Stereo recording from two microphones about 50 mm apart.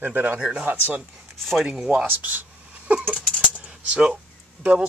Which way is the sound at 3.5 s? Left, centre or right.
Right.